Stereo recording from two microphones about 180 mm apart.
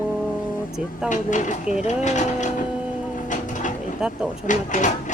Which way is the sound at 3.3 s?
45° left (ahead or behind).